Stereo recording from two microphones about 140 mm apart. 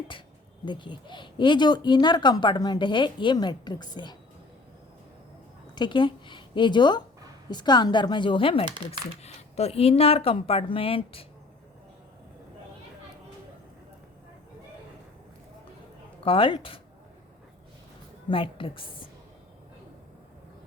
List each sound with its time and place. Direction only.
0.6 s speech: 35° left (ahead or behind)
5.7 s a woman's voice: 35° left (ahead or behind)
16.2 s speech: 40° left (ahead or behind)
18.3 s speech: 35° left (ahead or behind)